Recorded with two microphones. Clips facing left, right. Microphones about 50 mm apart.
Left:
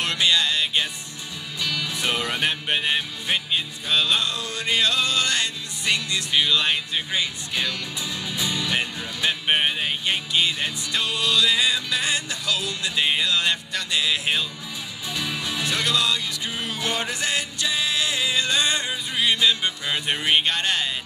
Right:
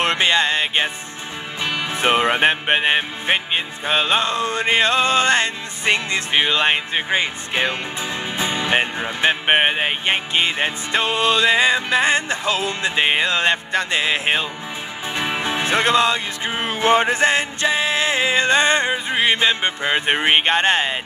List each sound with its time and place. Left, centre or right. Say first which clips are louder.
0.0 s music: right 5 dB; right